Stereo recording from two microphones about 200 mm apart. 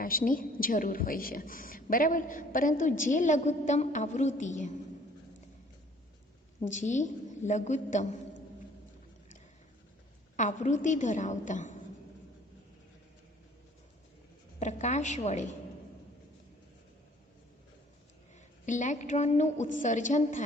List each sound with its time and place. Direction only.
0.0 s a woman's voice: 45° left (ahead or behind)
6.6 s a woman's voice: 35° left (ahead or behind)
10.3 s a woman's voice: 35° left (ahead or behind)
14.6 s a woman's voice: 35° left (ahead or behind)
18.6 s a woman's voice: 40° left (ahead or behind)